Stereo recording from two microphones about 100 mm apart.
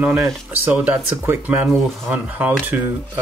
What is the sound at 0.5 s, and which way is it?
Speech, 15° right (ahead or behind).